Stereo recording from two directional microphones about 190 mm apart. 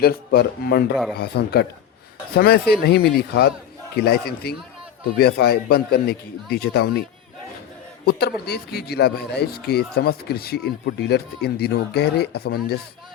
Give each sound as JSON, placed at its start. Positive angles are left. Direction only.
{"t": 0.0, "sound": "a man's voice", "side_deg": 55}
{"t": 8.2, "sound": "a man's voice", "side_deg": 55}